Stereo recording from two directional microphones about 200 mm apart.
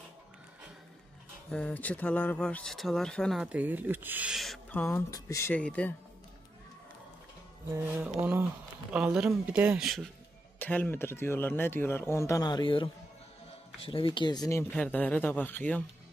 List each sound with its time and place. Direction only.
1.5 s speech: 5° left (ahead or behind)
7.7 s music: 10° right (ahead or behind)
8.9 s speech: 5° right (ahead or behind)
10.6 s speech: 10° left (ahead or behind)